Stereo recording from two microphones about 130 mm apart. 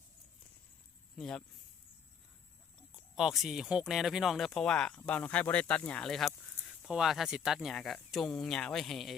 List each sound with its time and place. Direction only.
1.1 s speech: 5° left (ahead or behind)
3.2 s speech: centre (ahead or behind)